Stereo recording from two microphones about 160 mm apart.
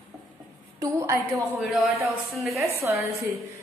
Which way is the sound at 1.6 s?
Centre (ahead or behind).